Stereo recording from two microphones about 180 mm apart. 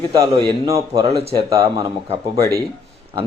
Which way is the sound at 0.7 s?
20° right (ahead or behind).